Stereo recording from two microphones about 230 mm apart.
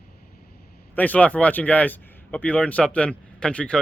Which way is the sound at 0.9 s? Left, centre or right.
Centre.